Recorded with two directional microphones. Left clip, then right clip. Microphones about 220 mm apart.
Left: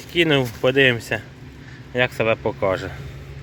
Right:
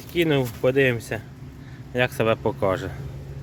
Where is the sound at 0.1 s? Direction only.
Centre (ahead or behind).